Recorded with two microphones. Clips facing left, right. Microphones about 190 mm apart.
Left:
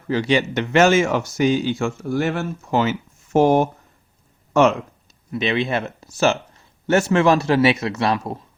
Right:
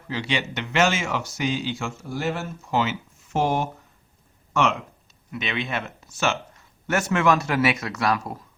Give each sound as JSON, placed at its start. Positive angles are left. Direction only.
{"t": 0.1, "sound": "speech", "side_deg": 45}